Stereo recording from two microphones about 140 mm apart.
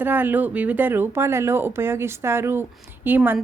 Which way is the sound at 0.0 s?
15° right (ahead or behind).